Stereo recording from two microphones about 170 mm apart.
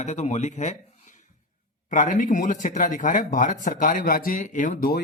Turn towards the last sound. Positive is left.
turn(degrees=55)  # may be behind; listen again after turning